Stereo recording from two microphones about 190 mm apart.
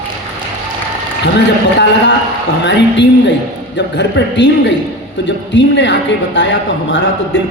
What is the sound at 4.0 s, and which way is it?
A man's voice, 65° left (ahead or behind).